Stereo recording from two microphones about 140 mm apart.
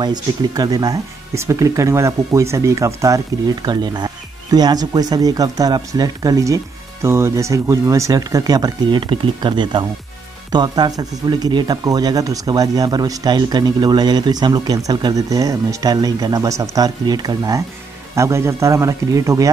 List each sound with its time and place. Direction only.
0.0 s speech: 30° right (ahead or behind)